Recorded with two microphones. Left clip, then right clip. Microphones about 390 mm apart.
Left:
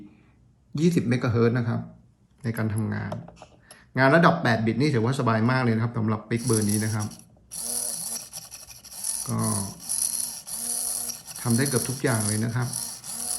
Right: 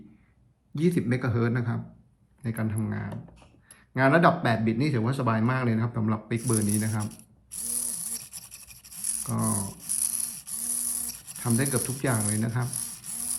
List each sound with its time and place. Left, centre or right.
0.8 s speech: centre
9.2 s speech: centre
10.0 s a sound: centre
11.3 s speech: centre